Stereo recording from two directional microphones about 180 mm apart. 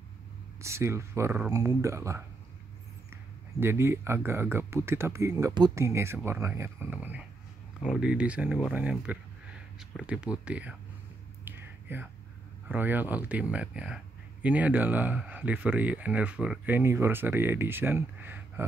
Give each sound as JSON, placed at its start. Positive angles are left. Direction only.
{"t": 0.6, "sound": "speech", "side_deg": -15}
{"t": 3.5, "sound": "speech", "side_deg": -15}
{"t": 11.4, "sound": "a sound", "side_deg": -10}
{"t": 12.6, "sound": "speech", "side_deg": -10}